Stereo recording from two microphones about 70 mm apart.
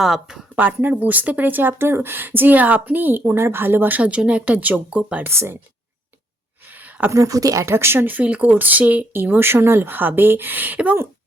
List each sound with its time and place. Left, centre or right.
0.0 s speech: centre
0.5 s speech: right
5.2 s speech: right
6.7 s a sound: right
7.1 s speech: right
7.6 s speech: right